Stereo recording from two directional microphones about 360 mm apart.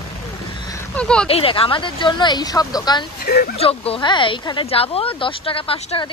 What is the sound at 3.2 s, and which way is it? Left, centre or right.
A woman's voice, left.